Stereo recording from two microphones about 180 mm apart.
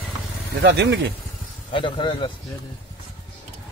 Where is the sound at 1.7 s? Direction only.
30° left (ahead or behind).